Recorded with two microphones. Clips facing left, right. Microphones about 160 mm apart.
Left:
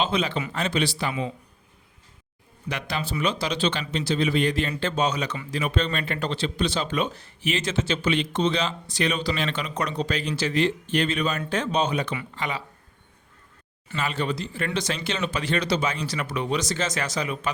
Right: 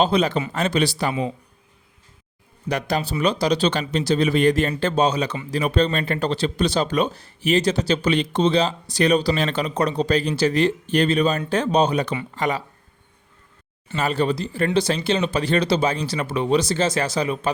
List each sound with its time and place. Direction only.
0.0 s speech: 40° right (ahead or behind)
2.6 s speech: 40° right (ahead or behind)
13.9 s speech: 40° right (ahead or behind)